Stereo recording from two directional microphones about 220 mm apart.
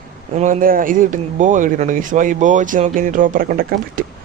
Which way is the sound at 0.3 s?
40° right (ahead or behind).